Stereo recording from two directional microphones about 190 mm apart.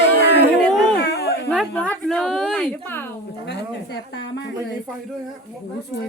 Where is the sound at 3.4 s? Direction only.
65° left (ahead or behind).